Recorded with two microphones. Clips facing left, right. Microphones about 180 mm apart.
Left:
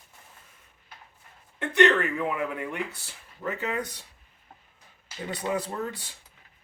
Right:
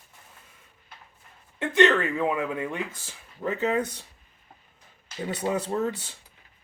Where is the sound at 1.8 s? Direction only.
20° right (ahead or behind).